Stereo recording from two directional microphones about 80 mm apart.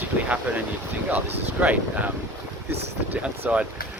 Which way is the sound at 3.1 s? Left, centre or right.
Centre.